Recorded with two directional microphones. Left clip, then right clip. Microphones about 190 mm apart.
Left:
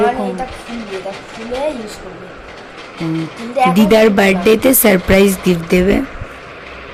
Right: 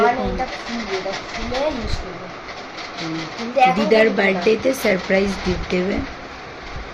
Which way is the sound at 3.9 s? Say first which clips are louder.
Left 5 dB; 70° left (ahead or behind).